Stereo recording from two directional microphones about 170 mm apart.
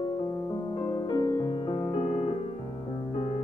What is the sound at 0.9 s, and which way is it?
Music, 25° left (ahead or behind).